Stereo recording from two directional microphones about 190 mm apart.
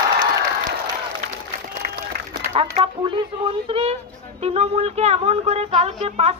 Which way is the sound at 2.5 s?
30° right (ahead or behind).